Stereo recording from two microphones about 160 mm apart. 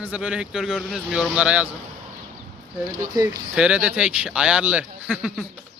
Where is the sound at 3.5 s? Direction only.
5° right (ahead or behind).